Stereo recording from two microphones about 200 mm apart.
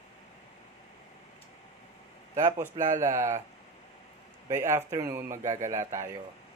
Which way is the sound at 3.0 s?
15° right (ahead or behind).